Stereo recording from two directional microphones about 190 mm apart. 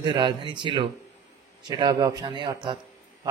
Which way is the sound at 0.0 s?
25° right (ahead or behind).